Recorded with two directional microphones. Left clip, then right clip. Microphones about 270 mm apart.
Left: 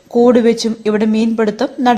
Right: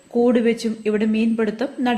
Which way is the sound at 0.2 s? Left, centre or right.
Centre.